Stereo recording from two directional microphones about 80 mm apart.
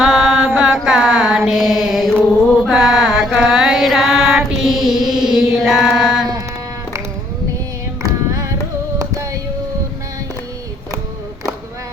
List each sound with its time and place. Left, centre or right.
0.0 s mantra: centre
0.6 s a sound: centre
1.5 s mantra: centre
8.0 s carnatic music: right